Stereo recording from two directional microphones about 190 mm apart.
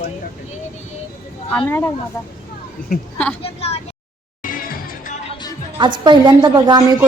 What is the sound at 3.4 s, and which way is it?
Speech, 30° left (ahead or behind).